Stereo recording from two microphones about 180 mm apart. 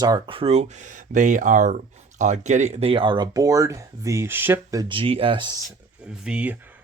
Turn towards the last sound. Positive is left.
turn(degrees=-5)  # may be behind; listen again after turning